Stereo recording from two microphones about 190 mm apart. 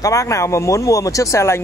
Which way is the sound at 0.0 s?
15° left (ahead or behind).